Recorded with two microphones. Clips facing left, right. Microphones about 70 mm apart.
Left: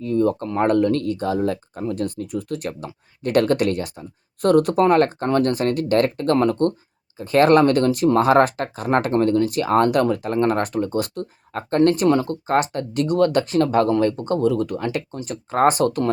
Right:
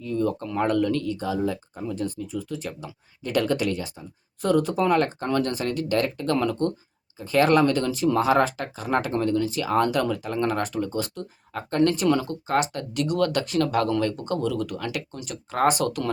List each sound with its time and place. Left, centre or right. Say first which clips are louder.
0.0 s speech: left 6 dB; left